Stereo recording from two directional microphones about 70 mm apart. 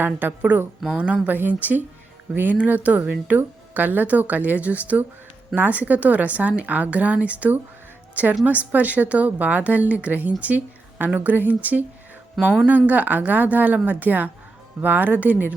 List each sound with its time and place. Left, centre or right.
0.0 s speech: right
0.9 s speech: centre